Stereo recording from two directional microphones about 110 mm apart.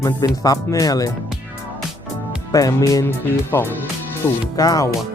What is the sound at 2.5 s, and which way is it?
Speech, 30° left (ahead or behind).